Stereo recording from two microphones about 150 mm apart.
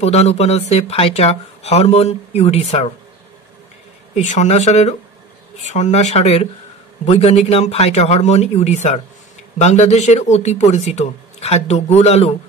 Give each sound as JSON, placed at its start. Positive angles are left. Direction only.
{"t": 0.0, "sound": "speech", "side_deg": 45}
{"t": 4.1, "sound": "speech", "side_deg": 50}